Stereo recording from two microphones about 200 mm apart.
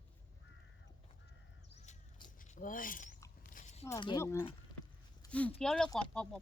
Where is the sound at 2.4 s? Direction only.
40° left (ahead or behind).